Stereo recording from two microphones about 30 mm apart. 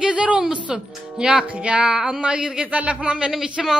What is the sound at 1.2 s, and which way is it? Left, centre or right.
Speech, right.